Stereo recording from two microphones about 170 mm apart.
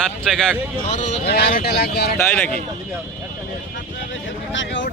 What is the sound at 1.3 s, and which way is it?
Speech, 70° left (ahead or behind).